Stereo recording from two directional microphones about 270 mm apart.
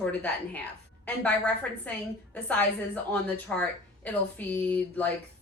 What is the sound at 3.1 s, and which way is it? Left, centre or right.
A woman's voice, centre.